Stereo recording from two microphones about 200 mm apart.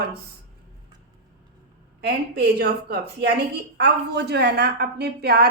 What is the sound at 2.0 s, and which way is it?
A woman's voice, 55° right (ahead or behind).